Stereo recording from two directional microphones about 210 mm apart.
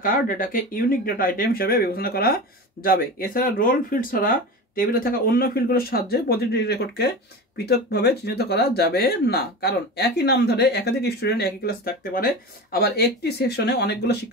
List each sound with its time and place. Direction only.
0.0 s speech: 40° left (ahead or behind)